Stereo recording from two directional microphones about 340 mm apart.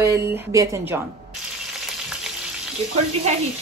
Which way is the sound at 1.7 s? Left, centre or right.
Centre.